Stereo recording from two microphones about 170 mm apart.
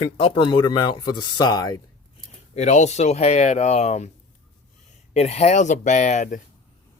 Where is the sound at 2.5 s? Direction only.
45° left (ahead or behind).